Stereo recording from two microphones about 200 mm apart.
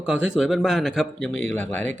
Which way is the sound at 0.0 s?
5° right (ahead or behind).